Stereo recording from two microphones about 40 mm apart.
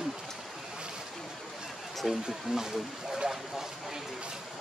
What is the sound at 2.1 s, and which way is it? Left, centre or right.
Speech, centre.